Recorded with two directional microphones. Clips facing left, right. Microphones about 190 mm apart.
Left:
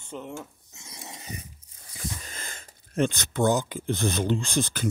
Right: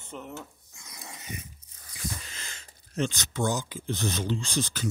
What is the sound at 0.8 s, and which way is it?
Dog, 25° left (ahead or behind).